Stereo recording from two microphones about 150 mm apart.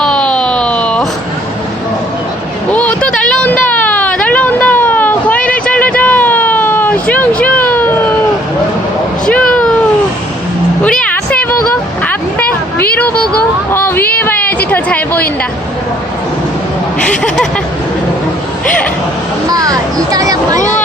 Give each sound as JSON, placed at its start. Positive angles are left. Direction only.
{"t": 0.0, "sound": "a sound", "side_deg": 5}
{"t": 2.7, "sound": "vehicle", "side_deg": 10}
{"t": 9.2, "sound": "cat", "side_deg": 5}
{"t": 10.8, "sound": "a sound", "side_deg": 5}
{"t": 17.0, "sound": "speech", "side_deg": 5}
{"t": 19.5, "sound": "speech", "side_deg": -25}